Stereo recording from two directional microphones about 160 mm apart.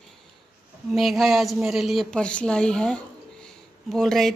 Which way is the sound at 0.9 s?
Centre (ahead or behind).